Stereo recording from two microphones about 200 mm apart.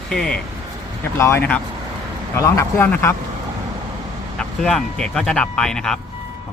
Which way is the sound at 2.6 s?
10° left (ahead or behind).